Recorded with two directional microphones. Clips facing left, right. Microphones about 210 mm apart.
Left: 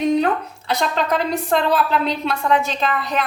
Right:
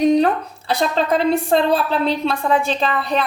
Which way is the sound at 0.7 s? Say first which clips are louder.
Right 2 dB; 30° right (ahead or behind).